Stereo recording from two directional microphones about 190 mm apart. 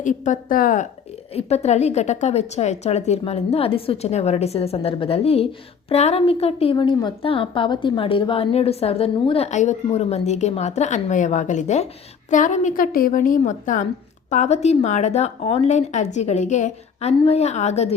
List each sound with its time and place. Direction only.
0.0 s a woman's voice: 40° left (ahead or behind)
1.3 s a woman's voice: 35° left (ahead or behind)